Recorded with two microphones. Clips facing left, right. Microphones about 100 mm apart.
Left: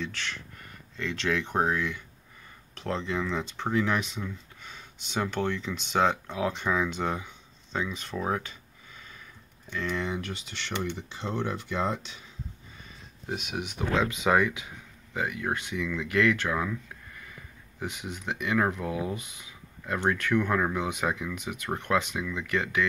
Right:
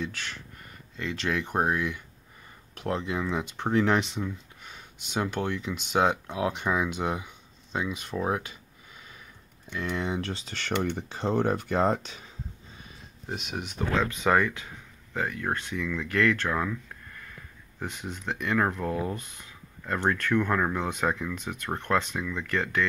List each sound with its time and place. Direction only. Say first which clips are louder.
0.0 s speech: even; 5° right (ahead or behind)
9.8 s speech: right 1 dB; 20° right (ahead or behind); by 10.7 s 40° right (ahead or behind)
10.7 s speech: right 4 dB; 60° right (ahead or behind)
11.0 s speech: right 6 dB; 45° right (ahead or behind)
13.3 s speech: left 1 dB; centre (ahead or behind)
17.7 s speech: even; 10° left (ahead or behind)